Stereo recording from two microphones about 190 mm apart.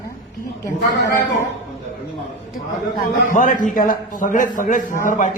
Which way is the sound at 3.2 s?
45° left (ahead or behind).